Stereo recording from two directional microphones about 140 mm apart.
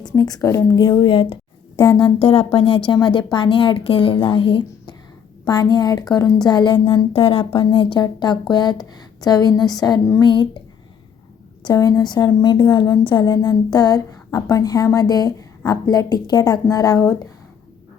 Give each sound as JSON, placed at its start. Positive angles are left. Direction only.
{"t": 0.0, "sound": "a woman's voice", "side_deg": 25}
{"t": 0.8, "sound": "a woman's voice", "side_deg": 35}
{"t": 11.6, "sound": "a woman's voice", "side_deg": 25}